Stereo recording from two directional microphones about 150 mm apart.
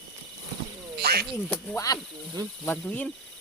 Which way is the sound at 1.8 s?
25° left (ahead or behind).